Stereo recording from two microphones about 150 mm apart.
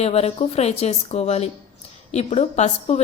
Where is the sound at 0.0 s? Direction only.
45° left (ahead or behind).